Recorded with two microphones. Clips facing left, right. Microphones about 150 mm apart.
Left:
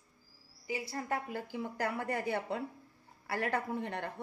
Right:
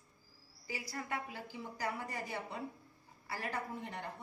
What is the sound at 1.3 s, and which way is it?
Speech, 60° left (ahead or behind).